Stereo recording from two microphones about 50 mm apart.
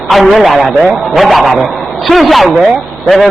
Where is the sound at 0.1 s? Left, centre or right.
Centre.